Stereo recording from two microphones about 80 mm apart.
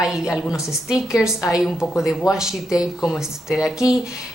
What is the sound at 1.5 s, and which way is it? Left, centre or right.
A woman's voice, centre.